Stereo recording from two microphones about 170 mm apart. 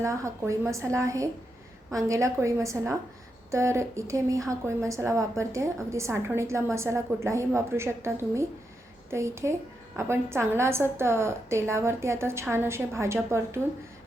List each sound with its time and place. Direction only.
0.0 s a woman's voice: 20° right (ahead or behind)